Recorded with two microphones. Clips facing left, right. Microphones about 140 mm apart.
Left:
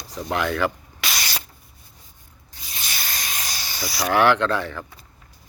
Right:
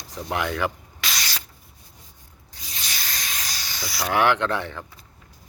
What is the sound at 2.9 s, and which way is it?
Hiss, 55° left (ahead or behind).